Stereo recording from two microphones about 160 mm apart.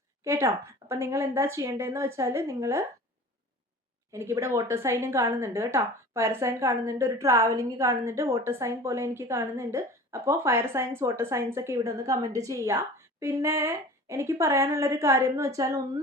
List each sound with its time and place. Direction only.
0.3 s a woman's voice: 15° right (ahead or behind)
4.1 s a woman's voice: 15° right (ahead or behind)